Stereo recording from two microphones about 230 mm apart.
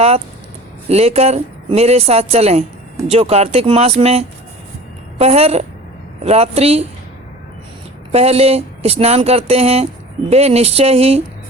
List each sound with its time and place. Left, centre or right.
0.9 s speech: right
8.1 s speech: right